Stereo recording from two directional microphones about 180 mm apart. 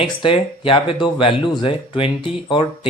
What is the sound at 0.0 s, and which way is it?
Speech, 30° left (ahead or behind).